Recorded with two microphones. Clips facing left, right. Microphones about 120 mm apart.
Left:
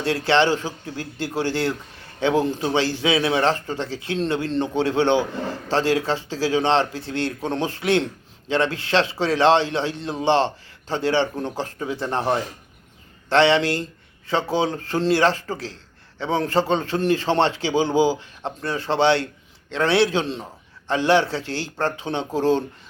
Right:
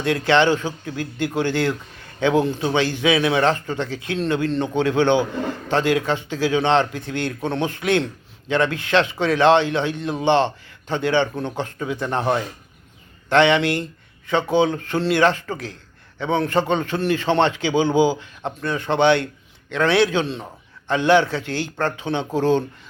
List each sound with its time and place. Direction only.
0.0 s a man's voice: 30° left (ahead or behind)